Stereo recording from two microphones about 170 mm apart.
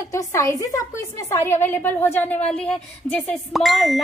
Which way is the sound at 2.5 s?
5° left (ahead or behind).